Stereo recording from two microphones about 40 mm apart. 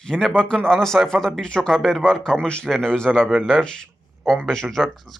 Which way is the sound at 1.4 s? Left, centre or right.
Centre.